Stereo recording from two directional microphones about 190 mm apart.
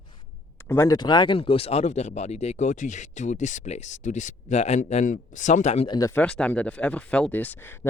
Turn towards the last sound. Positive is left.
turn(degrees=10)  # may be behind; listen again after turning